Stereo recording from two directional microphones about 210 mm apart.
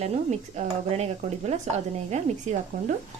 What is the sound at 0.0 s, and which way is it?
Speech, 30° right (ahead or behind).